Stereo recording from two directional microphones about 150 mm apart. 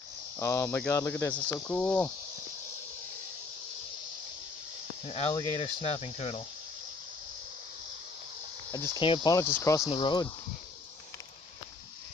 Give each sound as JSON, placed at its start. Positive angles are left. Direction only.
{"t": 0.4, "sound": "speech", "side_deg": 20}
{"t": 5.0, "sound": "speech", "side_deg": 45}
{"t": 5.3, "sound": "speech", "side_deg": 25}
{"t": 5.8, "sound": "speech", "side_deg": 40}
{"t": 8.7, "sound": "speech", "side_deg": 20}
{"t": 9.8, "sound": "speech", "side_deg": 35}